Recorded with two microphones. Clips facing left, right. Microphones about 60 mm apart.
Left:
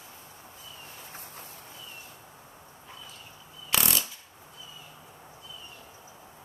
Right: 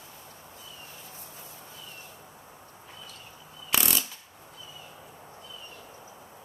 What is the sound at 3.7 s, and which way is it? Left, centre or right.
Power tool, centre.